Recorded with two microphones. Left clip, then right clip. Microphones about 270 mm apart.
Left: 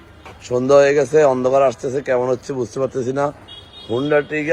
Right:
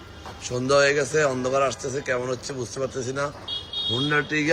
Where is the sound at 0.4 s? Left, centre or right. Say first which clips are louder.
Left 7 dB; centre.